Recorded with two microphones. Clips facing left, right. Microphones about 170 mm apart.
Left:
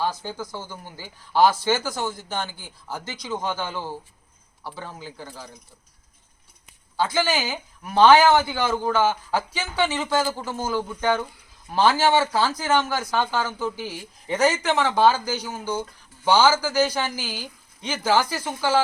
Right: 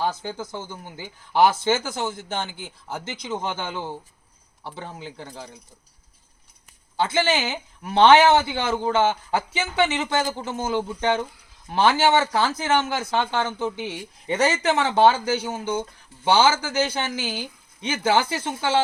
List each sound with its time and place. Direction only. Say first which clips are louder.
0.0 s speech: right 1 dB; 20° right (ahead or behind)
6.9 s speech: right 1 dB; 25° right (ahead or behind)